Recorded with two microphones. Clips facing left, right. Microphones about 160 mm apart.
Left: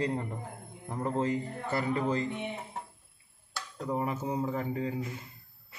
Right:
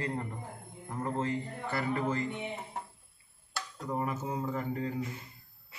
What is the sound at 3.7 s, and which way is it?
Speech, 10° left (ahead or behind).